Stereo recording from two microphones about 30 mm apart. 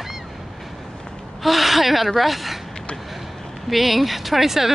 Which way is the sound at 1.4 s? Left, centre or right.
Centre.